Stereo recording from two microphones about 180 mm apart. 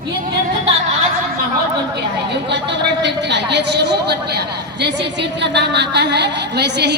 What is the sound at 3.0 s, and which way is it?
A man's voice, 70° right (ahead or behind).